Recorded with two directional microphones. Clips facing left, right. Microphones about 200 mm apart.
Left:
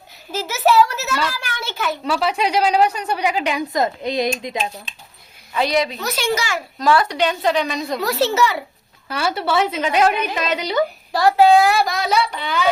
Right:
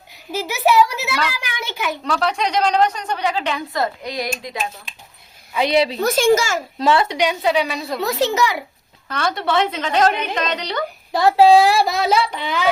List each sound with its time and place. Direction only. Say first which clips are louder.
0.3 s a sound: even; 15° right (ahead or behind)
2.0 s a woman's voice: left 1 dB; 5° left (ahead or behind); by 4.3 s 25° left (ahead or behind)
5.7 s speech: right 4 dB; 30° right (ahead or behind)
6.0 s a child's voice: right 7 dB; 50° right (ahead or behind)
6.7 s speech: even; 25° right (ahead or behind)
7.2 s a woman's voice: even; 10° right (ahead or behind)
8.0 s a woman's voice: even; 15° right (ahead or behind)
9.0 s a woman's voice: even; 5° left (ahead or behind)
11.1 s speech: right 1 dB; 20° right (ahead or behind)